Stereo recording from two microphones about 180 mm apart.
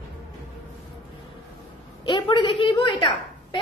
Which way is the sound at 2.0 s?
30° left (ahead or behind).